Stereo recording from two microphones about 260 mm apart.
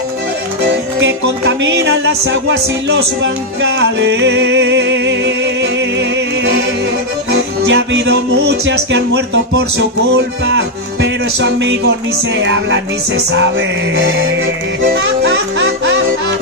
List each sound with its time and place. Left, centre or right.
1.6 s music: right